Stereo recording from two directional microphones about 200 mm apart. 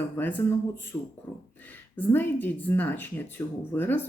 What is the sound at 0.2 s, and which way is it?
Speech, 10° left (ahead or behind).